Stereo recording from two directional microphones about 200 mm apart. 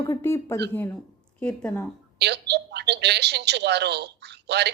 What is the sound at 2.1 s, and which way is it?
A woman's voice, 55° right (ahead or behind).